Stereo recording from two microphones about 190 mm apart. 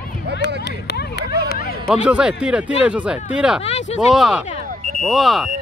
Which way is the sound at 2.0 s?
5° right (ahead or behind).